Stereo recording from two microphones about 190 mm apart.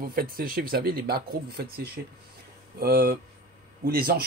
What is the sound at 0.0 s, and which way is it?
Speech, 50° right (ahead or behind).